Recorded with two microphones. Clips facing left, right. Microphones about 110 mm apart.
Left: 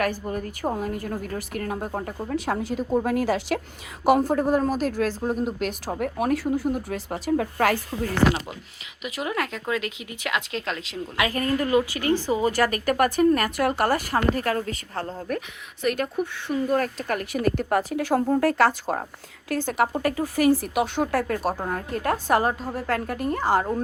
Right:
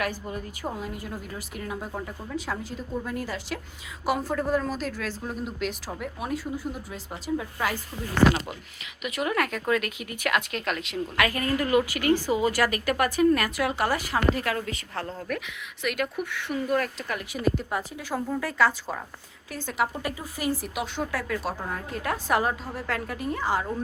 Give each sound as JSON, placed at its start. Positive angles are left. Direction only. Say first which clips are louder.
{"t": 0.0, "sound": "a woman's voice", "louder": "left 5 dB", "side_deg": 45}
{"t": 2.3, "sound": "speech", "louder": "left 7 dB", "side_deg": 65}
{"t": 3.0, "sound": "a woman's voice", "louder": "left 9 dB", "side_deg": 75}
{"t": 4.3, "sound": "a woman's voice", "louder": "left 5 dB", "side_deg": 45}
{"t": 6.0, "sound": "speech", "louder": "left 9 dB", "side_deg": 60}
{"t": 9.0, "sound": "speech", "louder": "right 1 dB", "side_deg": 25}
{"t": 12.6, "sound": "a woman's voice", "louder": "left 3 dB", "side_deg": 40}